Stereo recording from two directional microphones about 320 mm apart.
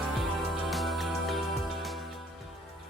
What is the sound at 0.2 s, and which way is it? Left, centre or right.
Music, centre.